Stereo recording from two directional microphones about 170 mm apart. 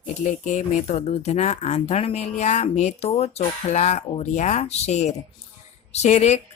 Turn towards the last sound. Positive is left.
turn(degrees=40)  # may be behind; listen again after turning